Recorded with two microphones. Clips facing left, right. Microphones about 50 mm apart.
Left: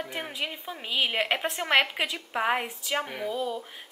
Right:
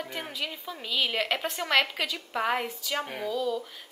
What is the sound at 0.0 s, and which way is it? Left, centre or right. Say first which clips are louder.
A woman's voice: left 1 dB; centre.